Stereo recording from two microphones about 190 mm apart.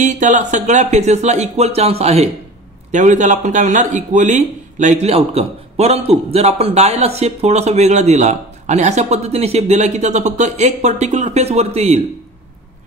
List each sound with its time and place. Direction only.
0.0 s speech: 40° right (ahead or behind)